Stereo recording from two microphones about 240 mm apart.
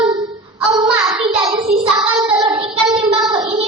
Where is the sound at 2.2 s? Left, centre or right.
Centre.